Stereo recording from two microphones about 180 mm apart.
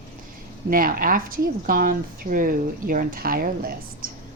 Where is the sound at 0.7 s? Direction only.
50° right (ahead or behind).